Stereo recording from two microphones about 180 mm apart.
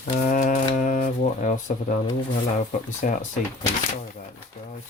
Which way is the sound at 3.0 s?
45° left (ahead or behind).